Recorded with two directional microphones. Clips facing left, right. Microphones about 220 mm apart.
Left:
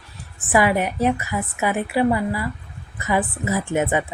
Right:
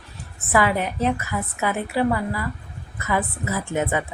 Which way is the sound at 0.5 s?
15° left (ahead or behind).